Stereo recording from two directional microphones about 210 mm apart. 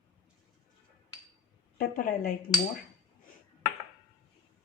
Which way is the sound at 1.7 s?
45° left (ahead or behind).